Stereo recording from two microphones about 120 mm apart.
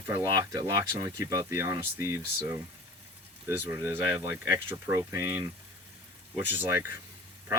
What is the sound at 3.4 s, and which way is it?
Speech, 20° right (ahead or behind).